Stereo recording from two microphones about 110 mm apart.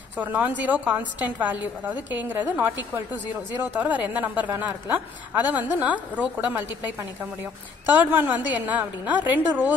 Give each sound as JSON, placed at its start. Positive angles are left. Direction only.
{"t": 0.2, "sound": "a woman's voice", "side_deg": -15}